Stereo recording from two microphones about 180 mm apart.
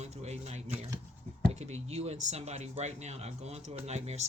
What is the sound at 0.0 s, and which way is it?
Speech, 35° right (ahead or behind).